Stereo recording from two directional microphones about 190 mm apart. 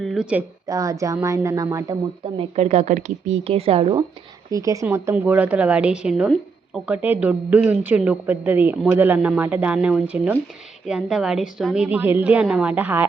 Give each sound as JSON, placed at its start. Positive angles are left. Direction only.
{"t": 0.0, "sound": "a woman's voice", "side_deg": 0}
{"t": 0.7, "sound": "a woman's voice", "side_deg": -15}
{"t": 2.4, "sound": "speech", "side_deg": -35}
{"t": 4.5, "sound": "a woman's voice", "side_deg": -15}